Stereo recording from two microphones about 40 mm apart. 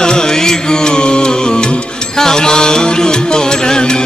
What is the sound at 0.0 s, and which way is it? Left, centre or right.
Music, centre.